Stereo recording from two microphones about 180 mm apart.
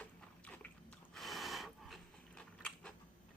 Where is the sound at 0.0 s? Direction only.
5° left (ahead or behind).